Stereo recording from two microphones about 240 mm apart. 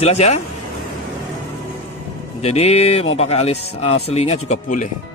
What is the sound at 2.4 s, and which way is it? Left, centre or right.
Speech, left.